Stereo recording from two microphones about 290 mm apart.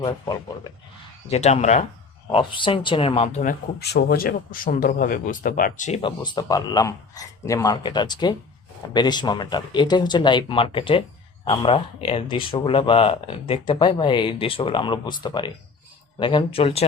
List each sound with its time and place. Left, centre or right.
1.3 s speech: left